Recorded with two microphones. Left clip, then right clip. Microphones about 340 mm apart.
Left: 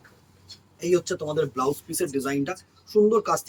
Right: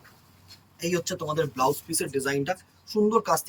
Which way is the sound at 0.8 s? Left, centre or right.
Centre.